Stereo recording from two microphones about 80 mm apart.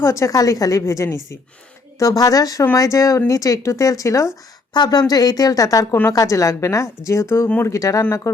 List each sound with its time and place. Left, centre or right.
0.0 s a woman's voice: left
4.7 s a woman's voice: left